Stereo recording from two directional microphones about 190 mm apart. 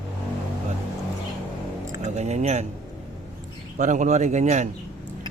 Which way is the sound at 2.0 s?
35° right (ahead or behind).